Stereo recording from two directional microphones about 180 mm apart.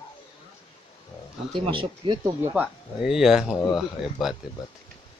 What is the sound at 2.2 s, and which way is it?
Speech, 10° right (ahead or behind).